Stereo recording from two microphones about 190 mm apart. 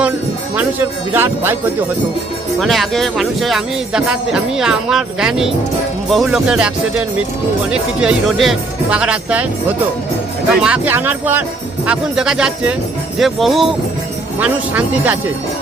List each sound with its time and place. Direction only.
0.5 s speech: 10° right (ahead or behind)
2.6 s speech: centre (ahead or behind)
7.7 s speech: 5° right (ahead or behind)
10.6 s speech: 10° right (ahead or behind)